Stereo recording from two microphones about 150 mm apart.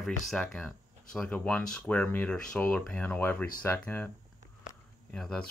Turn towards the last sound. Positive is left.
turn(degrees=5)  # may be behind; listen again after turning